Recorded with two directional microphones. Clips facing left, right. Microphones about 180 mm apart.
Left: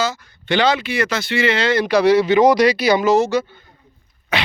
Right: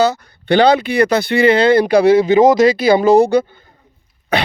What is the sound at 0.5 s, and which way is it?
Speech, 35° right (ahead or behind).